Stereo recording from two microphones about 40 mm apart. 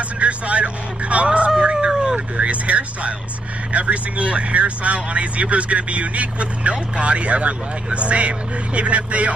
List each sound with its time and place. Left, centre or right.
0.2 s vehicle: right
1.6 s a sound: right
2.1 s speech: right